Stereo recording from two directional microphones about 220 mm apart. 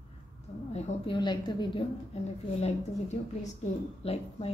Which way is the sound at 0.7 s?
25° left (ahead or behind).